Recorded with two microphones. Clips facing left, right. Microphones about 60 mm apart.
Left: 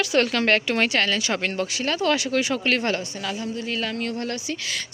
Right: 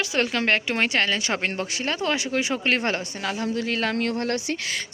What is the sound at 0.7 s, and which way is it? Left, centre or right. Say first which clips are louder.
A woman's voice: left 1 dB; right.